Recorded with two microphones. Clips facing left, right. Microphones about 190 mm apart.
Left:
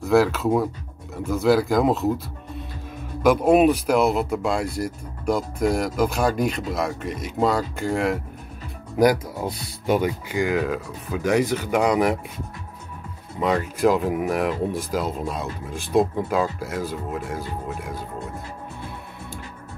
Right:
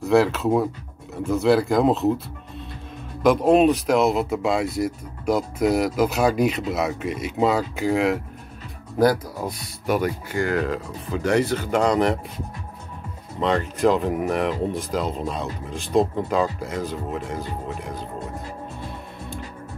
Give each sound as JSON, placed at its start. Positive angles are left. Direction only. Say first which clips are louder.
{"t": 0.0, "sound": "speech", "louder": "even", "side_deg": 0}
{"t": 8.9, "sound": "speech", "louder": "left 1 dB", "side_deg": 15}
{"t": 13.4, "sound": "speech", "louder": "even", "side_deg": 5}